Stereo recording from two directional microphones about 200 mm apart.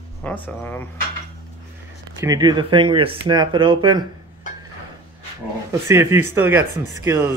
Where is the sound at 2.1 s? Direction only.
20° right (ahead or behind).